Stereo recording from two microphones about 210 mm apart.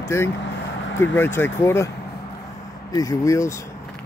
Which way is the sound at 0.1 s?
10° left (ahead or behind).